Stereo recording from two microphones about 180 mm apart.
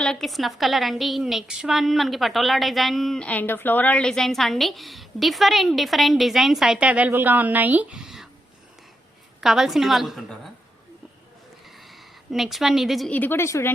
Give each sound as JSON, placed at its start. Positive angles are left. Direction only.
{"t": 0.0, "sound": "a woman's voice", "side_deg": 0}
{"t": 9.4, "sound": "a woman's voice", "side_deg": 0}
{"t": 11.8, "sound": "a woman's voice", "side_deg": 0}